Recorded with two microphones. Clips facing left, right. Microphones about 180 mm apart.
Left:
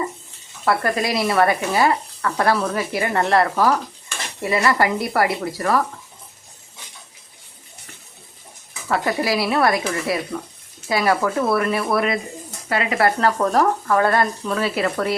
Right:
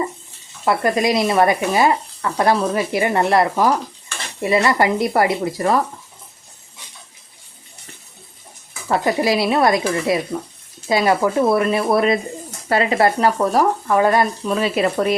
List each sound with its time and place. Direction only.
0.6 s speech: 20° right (ahead or behind)
8.9 s speech: 20° right (ahead or behind)